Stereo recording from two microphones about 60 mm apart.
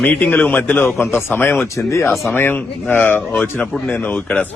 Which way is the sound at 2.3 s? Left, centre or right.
Left.